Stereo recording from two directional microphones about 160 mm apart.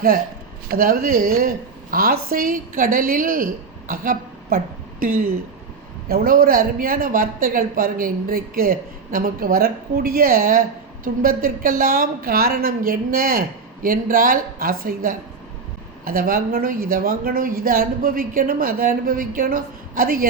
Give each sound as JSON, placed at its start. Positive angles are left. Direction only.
{"t": 0.7, "sound": "a woman's voice", "side_deg": -65}